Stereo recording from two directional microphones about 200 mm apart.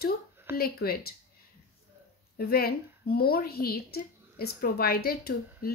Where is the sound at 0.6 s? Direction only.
50° left (ahead or behind).